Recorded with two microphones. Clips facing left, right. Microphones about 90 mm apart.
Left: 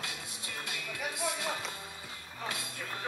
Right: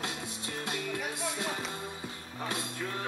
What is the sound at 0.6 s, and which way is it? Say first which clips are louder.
Music: right 9 dB; 35° right (ahead or behind).